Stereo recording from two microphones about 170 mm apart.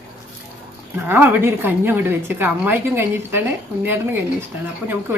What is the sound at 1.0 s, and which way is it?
A woman's voice, 15° right (ahead or behind).